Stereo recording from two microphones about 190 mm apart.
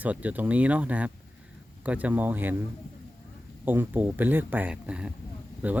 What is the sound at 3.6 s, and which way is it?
Speech, 10° right (ahead or behind).